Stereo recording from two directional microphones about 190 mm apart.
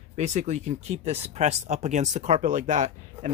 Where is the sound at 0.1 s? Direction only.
35° right (ahead or behind).